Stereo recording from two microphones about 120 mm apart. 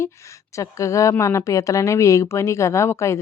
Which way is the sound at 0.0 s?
25° left (ahead or behind).